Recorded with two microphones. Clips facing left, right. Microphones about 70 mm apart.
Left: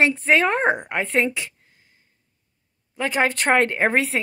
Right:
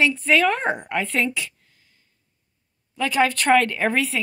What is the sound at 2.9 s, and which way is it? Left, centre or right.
A woman's voice, left.